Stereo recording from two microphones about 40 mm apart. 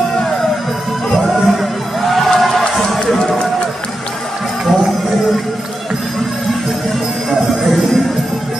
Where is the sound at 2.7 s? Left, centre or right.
Centre.